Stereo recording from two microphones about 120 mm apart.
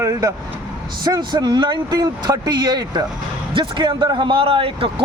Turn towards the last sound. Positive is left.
turn(degrees=-45)  # may be behind; listen again after turning